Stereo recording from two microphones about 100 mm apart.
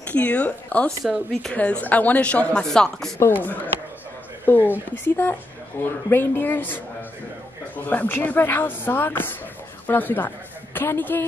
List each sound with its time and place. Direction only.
0.1 s speech: 15° left (ahead or behind)
1.0 s speech: centre (ahead or behind)
1.5 s speech: 15° left (ahead or behind)
3.2 s a man's voice: 20° left (ahead or behind)